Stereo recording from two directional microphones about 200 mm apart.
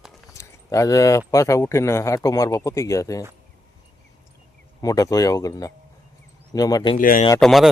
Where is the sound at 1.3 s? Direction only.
15° left (ahead or behind).